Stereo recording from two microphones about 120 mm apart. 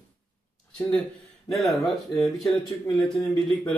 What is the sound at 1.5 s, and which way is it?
Speech, centre (ahead or behind).